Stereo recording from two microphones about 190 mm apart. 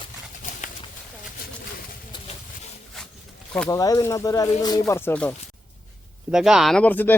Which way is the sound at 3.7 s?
20° left (ahead or behind).